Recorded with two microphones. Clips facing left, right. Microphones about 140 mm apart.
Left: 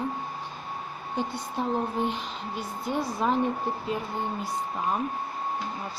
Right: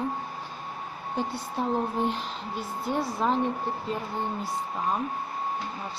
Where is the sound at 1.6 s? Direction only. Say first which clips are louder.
Right 1 dB; centre (ahead or behind).